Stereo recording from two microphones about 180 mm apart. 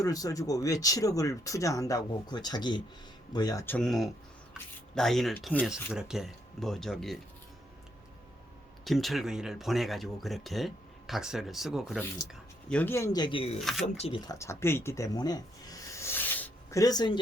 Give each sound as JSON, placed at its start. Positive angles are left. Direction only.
{"t": 0.0, "sound": "speech", "side_deg": 20}
{"t": 3.8, "sound": "speech", "side_deg": 0}
{"t": 8.8, "sound": "speech", "side_deg": 0}
{"t": 13.6, "sound": "speech", "side_deg": 0}
{"t": 13.8, "sound": "speech", "side_deg": 35}
{"t": 14.3, "sound": "speech", "side_deg": 15}